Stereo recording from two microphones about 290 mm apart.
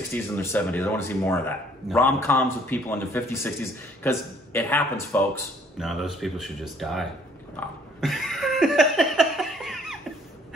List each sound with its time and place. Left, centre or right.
0.1 s a man's voice: centre
8.0 s laughter: centre